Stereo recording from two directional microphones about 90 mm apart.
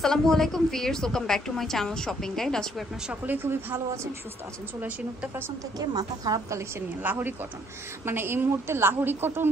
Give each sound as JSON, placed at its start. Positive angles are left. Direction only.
{"t": 0.0, "sound": "a woman's voice", "side_deg": 5}
{"t": 3.1, "sound": "a woman's voice", "side_deg": -20}
{"t": 5.8, "sound": "a woman's voice", "side_deg": -45}
{"t": 7.0, "sound": "a woman's voice", "side_deg": -20}